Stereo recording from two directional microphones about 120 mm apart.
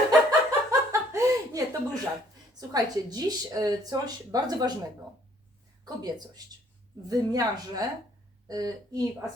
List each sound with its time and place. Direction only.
0.3 s a sound: 25° right (ahead or behind)
2.6 s speech: 30° right (ahead or behind)
5.8 s speech: 35° right (ahead or behind)